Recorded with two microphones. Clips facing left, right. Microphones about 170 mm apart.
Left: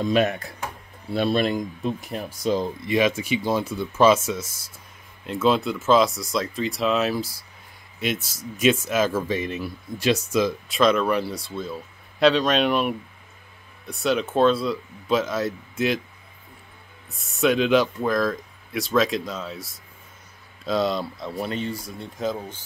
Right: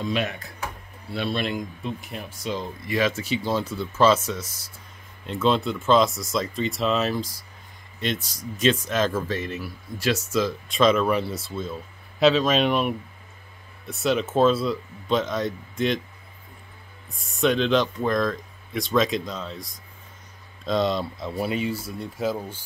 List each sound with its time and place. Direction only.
1.1 s speech: 40° left (ahead or behind)
2.9 s speech: 15° left (ahead or behind)
5.2 s speech: 5° left (ahead or behind)
10.7 s speech: centre (ahead or behind)
17.2 s speech: centre (ahead or behind)